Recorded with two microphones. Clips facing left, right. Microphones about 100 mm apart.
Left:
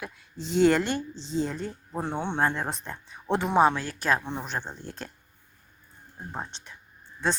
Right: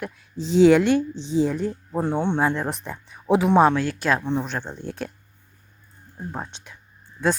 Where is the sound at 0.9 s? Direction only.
60° right (ahead or behind).